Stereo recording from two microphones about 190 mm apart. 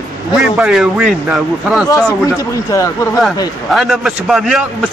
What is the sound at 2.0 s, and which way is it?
Speech, 15° left (ahead or behind).